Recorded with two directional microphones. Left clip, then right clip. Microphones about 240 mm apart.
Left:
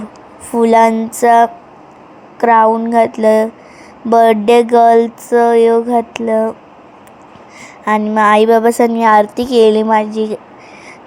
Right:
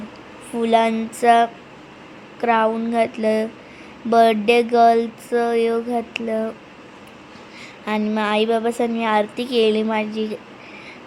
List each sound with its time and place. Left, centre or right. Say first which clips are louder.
0.6 s a woman's voice: left 8 dB; left
0.9 s speech: left 9 dB; centre
1.2 s a woman's voice: left 6 dB; centre
7.9 s a woman's voice: left 11 dB; centre